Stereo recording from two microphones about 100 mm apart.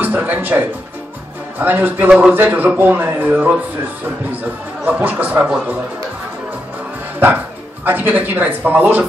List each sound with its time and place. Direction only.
0.0 s music: 15° right (ahead or behind)
1.6 s speech: 20° right (ahead or behind)
4.8 s speech: 15° right (ahead or behind)
7.8 s speech: 20° right (ahead or behind)